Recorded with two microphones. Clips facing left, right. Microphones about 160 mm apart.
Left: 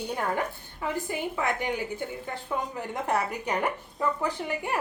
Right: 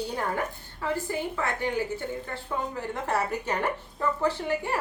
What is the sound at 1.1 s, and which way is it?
A woman's voice, 15° left (ahead or behind).